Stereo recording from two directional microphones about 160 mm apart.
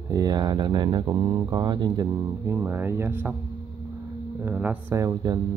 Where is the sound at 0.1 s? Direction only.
25° right (ahead or behind).